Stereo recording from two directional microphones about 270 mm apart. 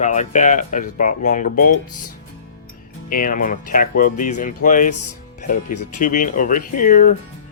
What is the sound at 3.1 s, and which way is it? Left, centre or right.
Speech, left.